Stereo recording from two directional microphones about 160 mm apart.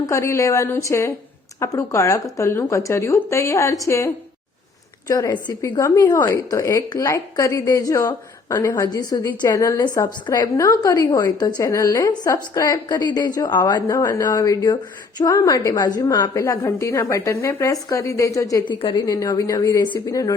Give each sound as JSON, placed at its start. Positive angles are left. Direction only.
{"t": 0.0, "sound": "a woman's voice", "side_deg": 20}